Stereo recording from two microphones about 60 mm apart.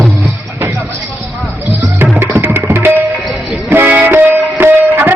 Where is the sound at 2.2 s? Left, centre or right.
Right.